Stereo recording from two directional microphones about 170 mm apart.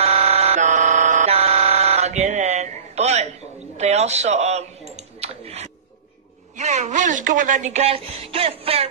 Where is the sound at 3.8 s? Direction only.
40° right (ahead or behind).